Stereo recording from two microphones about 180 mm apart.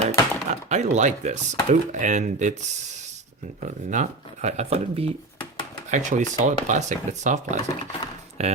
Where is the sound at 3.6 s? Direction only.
45° right (ahead or behind).